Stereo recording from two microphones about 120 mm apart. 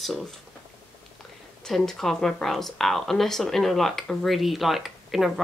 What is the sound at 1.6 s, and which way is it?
Speech, 5° left (ahead or behind).